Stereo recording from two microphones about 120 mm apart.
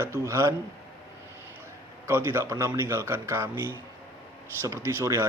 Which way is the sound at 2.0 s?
20° right (ahead or behind).